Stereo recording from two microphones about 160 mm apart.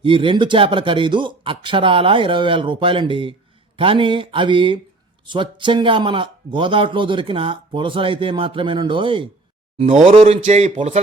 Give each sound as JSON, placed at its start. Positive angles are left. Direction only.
{"t": 0.0, "sound": "speech", "side_deg": -30}
{"t": 9.7, "sound": "speech", "side_deg": -45}